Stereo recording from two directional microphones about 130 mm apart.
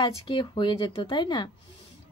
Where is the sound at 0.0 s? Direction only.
35° left (ahead or behind).